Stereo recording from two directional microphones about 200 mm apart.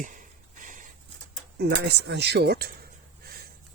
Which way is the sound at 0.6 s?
40° right (ahead or behind).